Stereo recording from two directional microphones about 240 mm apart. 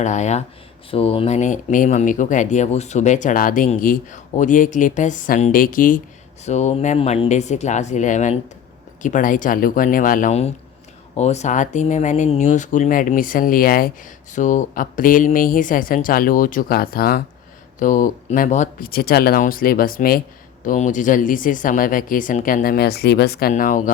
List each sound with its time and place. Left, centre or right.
0.0 s speech: left